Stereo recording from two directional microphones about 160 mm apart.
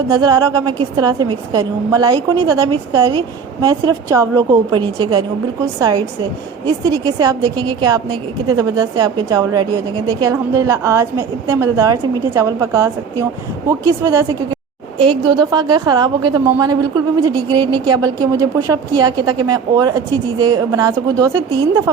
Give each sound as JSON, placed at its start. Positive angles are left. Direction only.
{"t": 0.1, "sound": "a woman's voice", "side_deg": -25}
{"t": 7.0, "sound": "a woman's voice", "side_deg": -25}
{"t": 14.9, "sound": "a woman's voice", "side_deg": -35}